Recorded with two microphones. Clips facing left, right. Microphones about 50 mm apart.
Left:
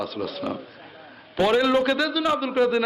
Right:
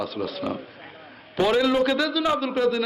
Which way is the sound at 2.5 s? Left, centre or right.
Centre.